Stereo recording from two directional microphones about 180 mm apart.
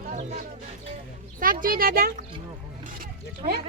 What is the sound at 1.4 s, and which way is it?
Speech, 50° right (ahead or behind).